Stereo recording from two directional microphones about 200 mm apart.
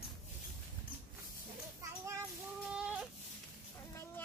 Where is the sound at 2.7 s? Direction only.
5° right (ahead or behind).